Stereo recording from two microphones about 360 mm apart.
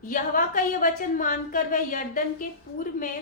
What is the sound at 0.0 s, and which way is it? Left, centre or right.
A woman's voice, left.